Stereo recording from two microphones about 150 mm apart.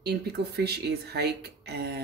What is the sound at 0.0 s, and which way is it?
Speech, 90° right.